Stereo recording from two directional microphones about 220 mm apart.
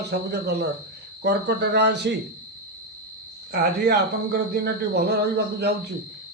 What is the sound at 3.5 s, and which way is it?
Speech, 45° right (ahead or behind).